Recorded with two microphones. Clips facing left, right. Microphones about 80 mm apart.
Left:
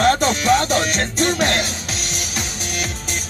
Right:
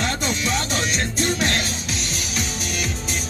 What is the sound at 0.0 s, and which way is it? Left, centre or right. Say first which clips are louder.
Music: left 8 dB; left.